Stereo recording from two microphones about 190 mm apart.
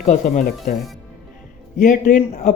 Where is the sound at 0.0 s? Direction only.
40° left (ahead or behind).